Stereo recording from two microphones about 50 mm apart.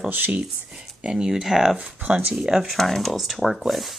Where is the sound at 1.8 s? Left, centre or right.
Right.